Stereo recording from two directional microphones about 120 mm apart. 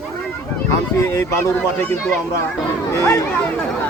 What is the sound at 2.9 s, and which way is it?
Speech, 25° left (ahead or behind).